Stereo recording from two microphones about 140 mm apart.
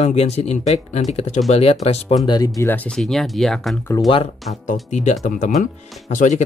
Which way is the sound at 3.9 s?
30° left (ahead or behind).